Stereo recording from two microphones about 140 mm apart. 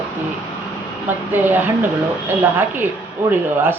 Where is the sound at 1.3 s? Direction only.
15° right (ahead or behind).